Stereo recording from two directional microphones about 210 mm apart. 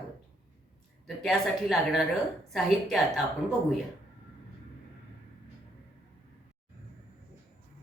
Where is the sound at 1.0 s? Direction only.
Centre (ahead or behind).